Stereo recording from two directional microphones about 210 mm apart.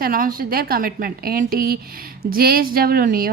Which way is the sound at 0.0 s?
40° right (ahead or behind).